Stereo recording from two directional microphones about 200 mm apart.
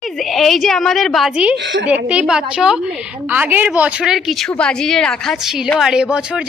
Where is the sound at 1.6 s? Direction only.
65° right (ahead or behind).